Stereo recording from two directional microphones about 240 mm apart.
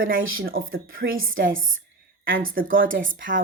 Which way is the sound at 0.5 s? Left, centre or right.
Right.